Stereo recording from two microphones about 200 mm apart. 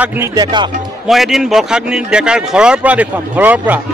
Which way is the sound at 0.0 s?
10° right (ahead or behind).